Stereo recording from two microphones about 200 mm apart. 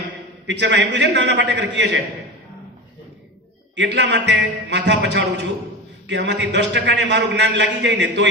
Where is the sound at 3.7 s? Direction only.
60° right (ahead or behind).